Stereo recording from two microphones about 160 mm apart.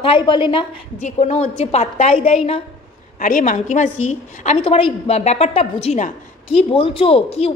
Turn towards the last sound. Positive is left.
turn(degrees=35)  # may be behind; listen again after turning